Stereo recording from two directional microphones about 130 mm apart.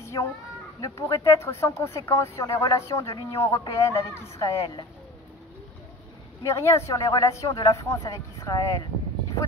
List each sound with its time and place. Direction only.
0.0 s a sound: 25° left (ahead or behind)
0.7 s speech: 25° left (ahead or behind)
4.6 s speech: 35° left (ahead or behind)
6.4 s speech: 20° left (ahead or behind)